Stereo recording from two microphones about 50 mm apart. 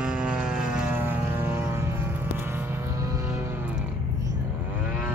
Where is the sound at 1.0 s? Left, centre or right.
Right.